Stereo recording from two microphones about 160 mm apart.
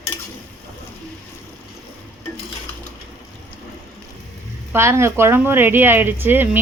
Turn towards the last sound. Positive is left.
turn(degrees=-15)  # may be behind; listen again after turning